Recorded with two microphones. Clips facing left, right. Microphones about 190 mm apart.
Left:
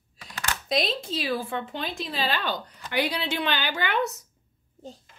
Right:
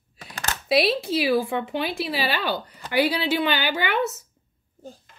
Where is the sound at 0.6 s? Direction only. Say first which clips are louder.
Right 7 dB; 5° right (ahead or behind).